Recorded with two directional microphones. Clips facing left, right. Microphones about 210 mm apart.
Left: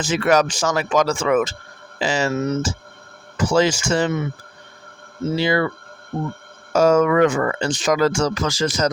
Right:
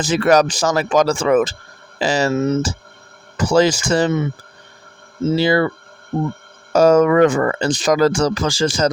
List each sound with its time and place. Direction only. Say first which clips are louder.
0.0 s speech: right 3 dB; 35° right (ahead or behind)
5.4 s speech: right 3 dB; 35° right (ahead or behind)
6.7 s speech: right 3 dB; 35° right (ahead or behind)